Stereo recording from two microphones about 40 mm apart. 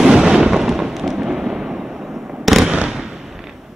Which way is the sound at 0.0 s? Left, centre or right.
Centre.